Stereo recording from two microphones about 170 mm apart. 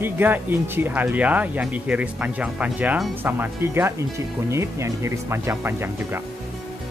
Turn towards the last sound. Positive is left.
turn(degrees=-15)  # may be behind; listen again after turning